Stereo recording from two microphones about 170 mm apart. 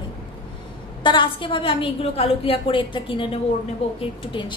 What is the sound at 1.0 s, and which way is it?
A woman's voice, 30° left (ahead or behind).